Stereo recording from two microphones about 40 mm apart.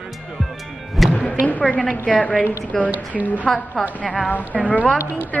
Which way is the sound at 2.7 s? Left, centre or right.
Centre.